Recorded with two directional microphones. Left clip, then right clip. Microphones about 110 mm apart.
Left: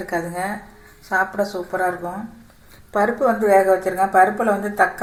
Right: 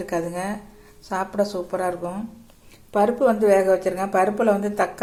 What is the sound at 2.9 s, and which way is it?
Speech, 25° right (ahead or behind).